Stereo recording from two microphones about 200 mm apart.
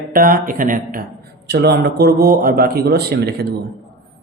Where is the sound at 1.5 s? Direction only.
55° right (ahead or behind).